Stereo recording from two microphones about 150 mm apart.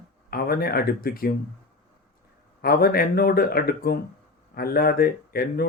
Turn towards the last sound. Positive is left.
turn(degrees=85)